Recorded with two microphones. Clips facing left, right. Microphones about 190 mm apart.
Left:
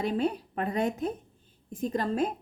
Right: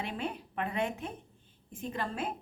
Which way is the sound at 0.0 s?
40° left (ahead or behind).